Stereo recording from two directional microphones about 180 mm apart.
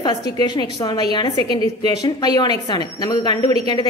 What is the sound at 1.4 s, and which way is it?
Speech, 35° right (ahead or behind).